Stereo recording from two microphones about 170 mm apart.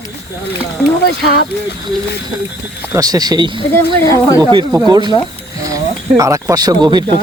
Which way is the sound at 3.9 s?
20° left (ahead or behind).